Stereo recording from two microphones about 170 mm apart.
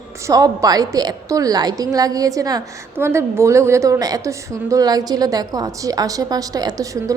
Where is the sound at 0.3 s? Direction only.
20° right (ahead or behind).